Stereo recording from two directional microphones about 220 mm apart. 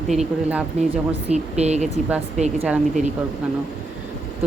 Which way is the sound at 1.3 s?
30° right (ahead or behind).